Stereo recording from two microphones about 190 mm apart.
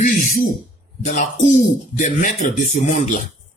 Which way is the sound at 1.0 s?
40° left (ahead or behind).